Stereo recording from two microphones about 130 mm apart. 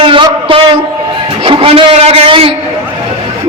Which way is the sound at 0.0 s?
40° right (ahead or behind).